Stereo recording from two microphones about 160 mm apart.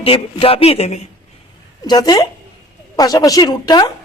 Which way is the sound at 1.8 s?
25° left (ahead or behind).